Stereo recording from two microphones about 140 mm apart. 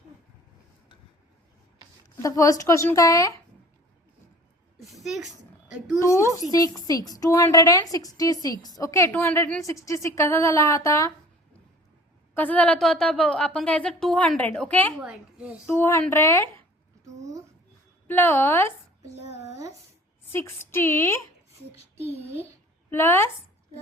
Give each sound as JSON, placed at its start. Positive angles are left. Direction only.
{"t": 2.2, "sound": "a woman's voice", "side_deg": 25}
{"t": 4.8, "sound": "a sound", "side_deg": 0}
{"t": 6.0, "sound": "a woman's voice", "side_deg": 20}
{"t": 12.3, "sound": "speech", "side_deg": 10}
{"t": 15.0, "sound": "speech", "side_deg": -5}
{"t": 15.6, "sound": "a woman's voice", "side_deg": 15}
{"t": 18.1, "sound": "speech", "side_deg": 15}
{"t": 20.3, "sound": "speech", "side_deg": 15}
{"t": 22.9, "sound": "speech", "side_deg": 15}